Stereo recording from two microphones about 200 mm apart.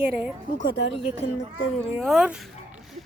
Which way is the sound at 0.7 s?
25° left (ahead or behind).